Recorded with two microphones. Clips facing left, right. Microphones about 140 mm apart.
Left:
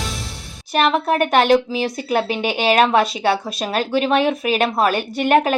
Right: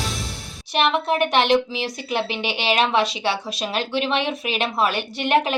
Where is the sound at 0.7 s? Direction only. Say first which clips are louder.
Left 3 dB; 45° left (ahead or behind).